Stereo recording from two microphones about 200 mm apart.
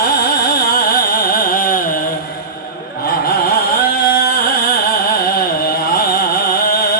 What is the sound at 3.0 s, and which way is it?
Carnatic music, 50° left (ahead or behind).